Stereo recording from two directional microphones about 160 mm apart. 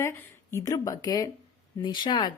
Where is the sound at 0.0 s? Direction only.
15° left (ahead or behind).